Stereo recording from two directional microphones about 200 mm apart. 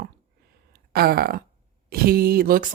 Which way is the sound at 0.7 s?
50° right (ahead or behind).